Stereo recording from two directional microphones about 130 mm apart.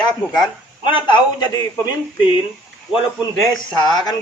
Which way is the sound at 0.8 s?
35° left (ahead or behind).